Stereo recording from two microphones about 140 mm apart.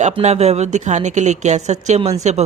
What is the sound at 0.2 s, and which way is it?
Speech, 50° right (ahead or behind).